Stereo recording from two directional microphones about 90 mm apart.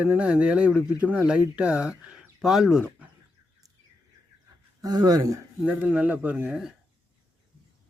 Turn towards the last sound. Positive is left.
turn(degrees=-15)  # may be behind; listen again after turning